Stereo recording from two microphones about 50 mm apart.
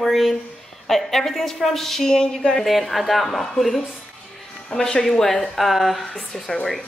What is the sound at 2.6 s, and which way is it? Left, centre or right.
A woman's voice, centre.